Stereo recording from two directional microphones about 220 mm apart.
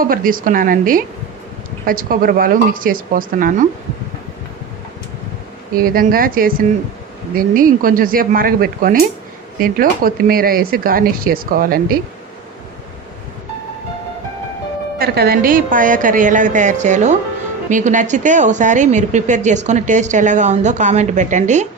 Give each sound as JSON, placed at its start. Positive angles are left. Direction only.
{"t": 0.0, "sound": "a woman's voice", "side_deg": -40}
{"t": 5.7, "sound": "a woman's voice", "side_deg": -40}
{"t": 14.9, "sound": "a woman's voice", "side_deg": -45}